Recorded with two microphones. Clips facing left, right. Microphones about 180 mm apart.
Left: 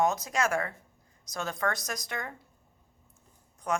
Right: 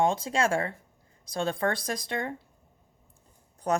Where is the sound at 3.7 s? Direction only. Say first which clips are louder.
Right 4 dB; 35° right (ahead or behind).